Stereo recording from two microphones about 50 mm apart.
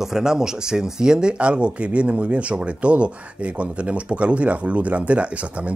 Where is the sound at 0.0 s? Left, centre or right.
Centre.